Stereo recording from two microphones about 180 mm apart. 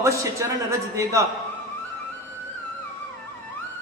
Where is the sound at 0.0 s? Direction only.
15° right (ahead or behind).